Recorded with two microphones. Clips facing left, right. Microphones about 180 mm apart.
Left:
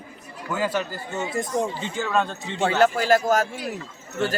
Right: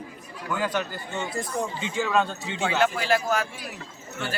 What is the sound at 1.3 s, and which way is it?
Speech, 20° left (ahead or behind).